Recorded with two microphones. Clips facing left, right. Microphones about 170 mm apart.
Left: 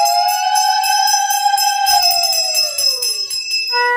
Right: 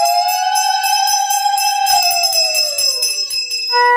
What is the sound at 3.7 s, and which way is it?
Music, 45° right (ahead or behind).